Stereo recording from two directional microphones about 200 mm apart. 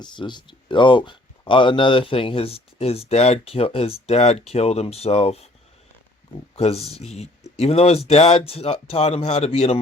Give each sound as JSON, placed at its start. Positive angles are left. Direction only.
{"t": 0.0, "sound": "speech", "side_deg": 20}
{"t": 6.6, "sound": "speech", "side_deg": 30}